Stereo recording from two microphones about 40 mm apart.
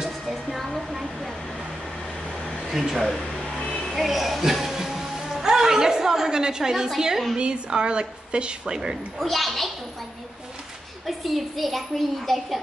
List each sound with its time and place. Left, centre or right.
0.3 s a sound: centre
2.7 s a woman's voice: centre
3.8 s music: centre
7.0 s a woman's voice: centre
9.2 s a woman's voice: centre
11.1 s a woman's voice: centre